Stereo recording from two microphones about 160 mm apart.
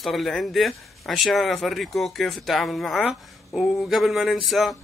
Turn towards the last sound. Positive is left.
turn(degrees=0)  # may be behind; listen again after turning